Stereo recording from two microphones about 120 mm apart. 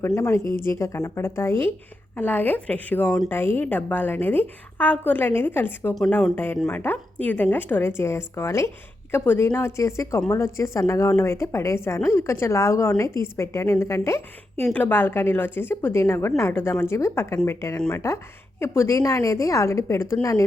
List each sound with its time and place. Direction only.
0.4 s a woman's voice: 20° left (ahead or behind)